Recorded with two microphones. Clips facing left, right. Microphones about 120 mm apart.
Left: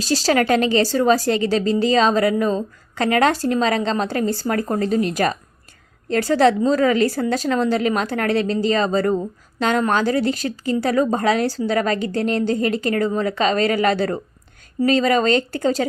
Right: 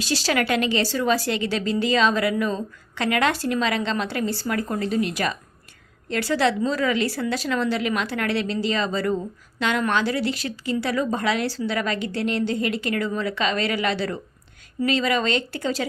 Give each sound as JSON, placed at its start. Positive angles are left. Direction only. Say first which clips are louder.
{"t": 0.0, "sound": "speech", "louder": "left 5 dB", "side_deg": 40}